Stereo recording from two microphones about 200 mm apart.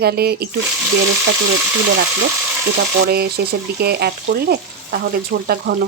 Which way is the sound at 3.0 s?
50° right (ahead or behind).